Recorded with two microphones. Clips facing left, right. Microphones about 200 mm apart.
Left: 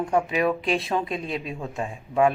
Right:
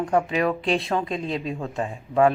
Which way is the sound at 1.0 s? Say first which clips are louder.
Right 2 dB; 25° right (ahead or behind).